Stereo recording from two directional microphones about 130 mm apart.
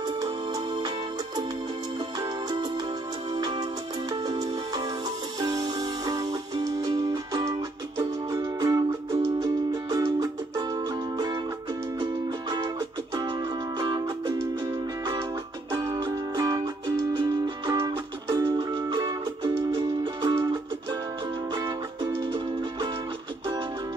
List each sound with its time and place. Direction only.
0.2 s music: 30° right (ahead or behind)
15.7 s music: 30° right (ahead or behind)
21.5 s music: 35° right (ahead or behind)